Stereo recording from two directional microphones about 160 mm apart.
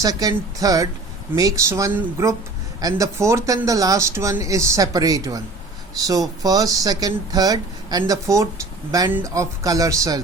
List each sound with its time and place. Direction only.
0.0 s speech: 25° right (ahead or behind)